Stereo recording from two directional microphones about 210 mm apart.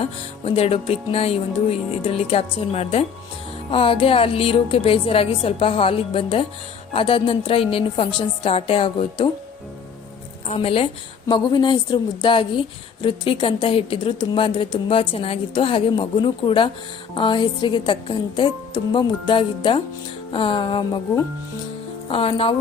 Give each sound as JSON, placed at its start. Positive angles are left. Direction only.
{"t": 0.0, "sound": "a woman's voice", "side_deg": 30}
{"t": 10.5, "sound": "a woman's voice", "side_deg": 25}
{"t": 22.1, "sound": "a woman's voice", "side_deg": 25}